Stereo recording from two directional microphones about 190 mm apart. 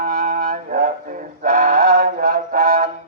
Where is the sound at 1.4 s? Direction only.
45° right (ahead or behind).